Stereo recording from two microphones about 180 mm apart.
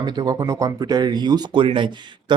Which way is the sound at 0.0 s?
25° right (ahead or behind).